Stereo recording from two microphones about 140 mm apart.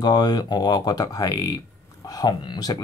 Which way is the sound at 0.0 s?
30° left (ahead or behind).